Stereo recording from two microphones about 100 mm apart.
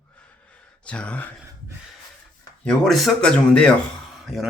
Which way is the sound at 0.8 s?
10° left (ahead or behind).